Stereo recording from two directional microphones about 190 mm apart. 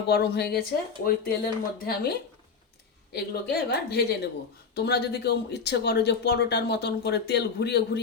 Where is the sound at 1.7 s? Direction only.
55° left (ahead or behind).